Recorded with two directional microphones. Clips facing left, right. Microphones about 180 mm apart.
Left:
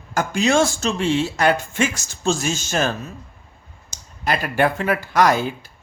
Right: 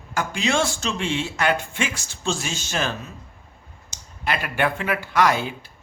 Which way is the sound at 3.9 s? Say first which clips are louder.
Left 3 dB; 40° left (ahead or behind).